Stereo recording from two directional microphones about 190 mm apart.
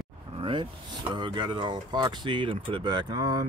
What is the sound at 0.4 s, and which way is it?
Vehicle, 25° right (ahead or behind).